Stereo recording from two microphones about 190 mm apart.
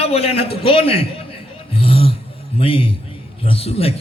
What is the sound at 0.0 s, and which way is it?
A man's voice, 30° left (ahead or behind).